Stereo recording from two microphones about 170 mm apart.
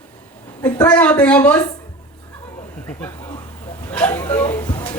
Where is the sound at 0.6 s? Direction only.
10° left (ahead or behind).